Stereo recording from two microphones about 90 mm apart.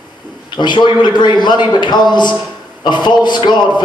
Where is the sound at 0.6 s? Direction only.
55° left (ahead or behind).